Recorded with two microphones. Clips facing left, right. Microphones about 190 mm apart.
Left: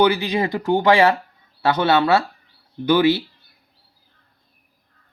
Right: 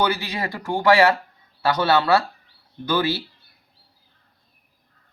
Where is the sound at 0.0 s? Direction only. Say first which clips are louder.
Left 6 dB; 20° left (ahead or behind).